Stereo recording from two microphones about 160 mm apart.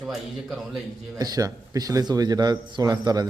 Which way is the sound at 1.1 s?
25° right (ahead or behind).